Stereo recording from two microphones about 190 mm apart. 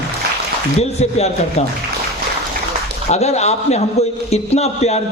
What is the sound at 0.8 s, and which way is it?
Speech, 35° left (ahead or behind).